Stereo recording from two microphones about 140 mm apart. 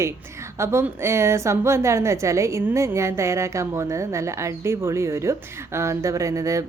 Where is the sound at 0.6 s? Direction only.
20° right (ahead or behind).